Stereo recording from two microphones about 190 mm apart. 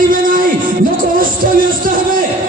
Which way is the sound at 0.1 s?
45° right (ahead or behind).